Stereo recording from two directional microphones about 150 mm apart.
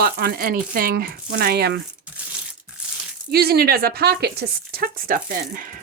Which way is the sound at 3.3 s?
90° right.